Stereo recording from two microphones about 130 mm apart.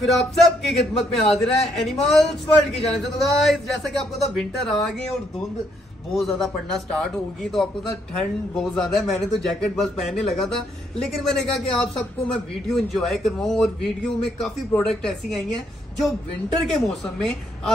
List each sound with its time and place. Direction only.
0.0 s speech: centre (ahead or behind)
6.1 s speech: centre (ahead or behind)
16.6 s speech: centre (ahead or behind)